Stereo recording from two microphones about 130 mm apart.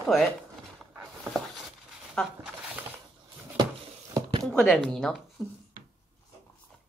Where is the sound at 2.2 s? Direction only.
5° left (ahead or behind).